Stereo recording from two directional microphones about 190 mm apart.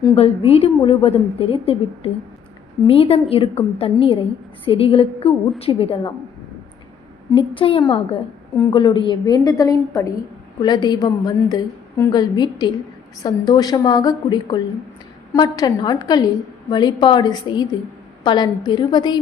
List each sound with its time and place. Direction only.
0.2 s a woman's voice: 30° left (ahead or behind)
7.3 s a woman's voice: 30° left (ahead or behind)